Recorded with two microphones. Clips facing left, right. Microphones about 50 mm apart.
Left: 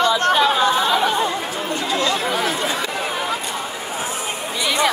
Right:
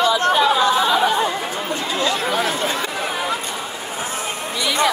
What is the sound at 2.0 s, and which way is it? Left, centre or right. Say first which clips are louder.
Chatter: right 2 dB; centre.